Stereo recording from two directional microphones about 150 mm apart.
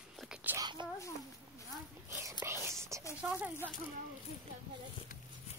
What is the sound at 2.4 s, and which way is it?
Whispering, 15° right (ahead or behind).